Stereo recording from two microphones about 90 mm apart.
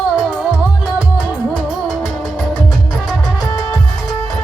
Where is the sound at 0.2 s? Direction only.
10° right (ahead or behind).